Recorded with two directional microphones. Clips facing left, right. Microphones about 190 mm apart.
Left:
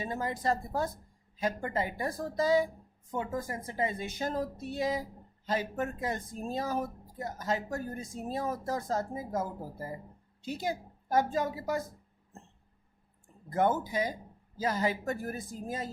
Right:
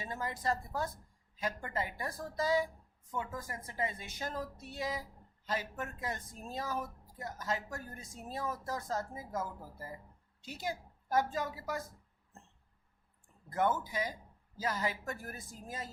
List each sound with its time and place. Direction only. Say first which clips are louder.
0.0 s speech: left 5 dB; 25° left (ahead or behind)
13.5 s speech: left 4 dB; 25° left (ahead or behind)